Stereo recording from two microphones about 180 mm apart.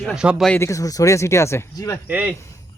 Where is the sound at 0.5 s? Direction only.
15° left (ahead or behind).